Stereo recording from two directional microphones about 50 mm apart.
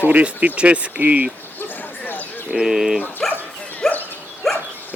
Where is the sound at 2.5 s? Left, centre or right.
Centre.